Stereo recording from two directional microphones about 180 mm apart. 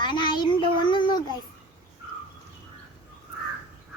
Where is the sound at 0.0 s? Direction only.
25° left (ahead or behind).